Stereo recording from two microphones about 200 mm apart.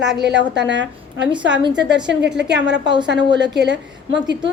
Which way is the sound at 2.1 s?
60° right (ahead or behind).